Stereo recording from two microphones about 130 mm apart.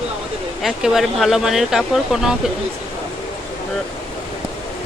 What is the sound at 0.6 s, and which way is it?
Speech, 5° right (ahead or behind).